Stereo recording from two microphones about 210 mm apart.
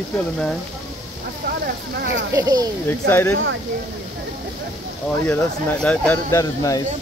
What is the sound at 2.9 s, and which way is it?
Speech, 10° left (ahead or behind).